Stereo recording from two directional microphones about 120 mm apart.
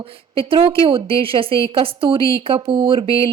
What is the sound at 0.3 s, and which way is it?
A woman's voice, 50° right (ahead or behind).